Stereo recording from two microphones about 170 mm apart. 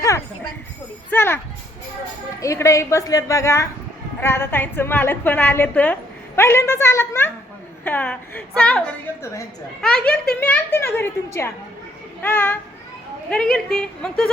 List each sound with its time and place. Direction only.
1.1 s a woman's voice: 15° left (ahead or behind)
2.4 s a woman's voice: 20° left (ahead or behind)